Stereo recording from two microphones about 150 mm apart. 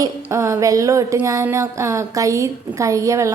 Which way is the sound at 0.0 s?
20° right (ahead or behind).